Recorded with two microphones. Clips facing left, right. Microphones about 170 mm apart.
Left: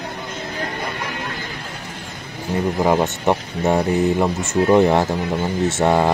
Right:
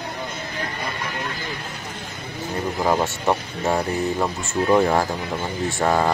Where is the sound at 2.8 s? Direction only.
15° left (ahead or behind).